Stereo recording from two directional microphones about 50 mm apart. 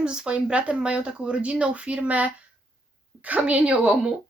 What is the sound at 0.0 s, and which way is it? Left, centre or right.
A woman's voice, centre.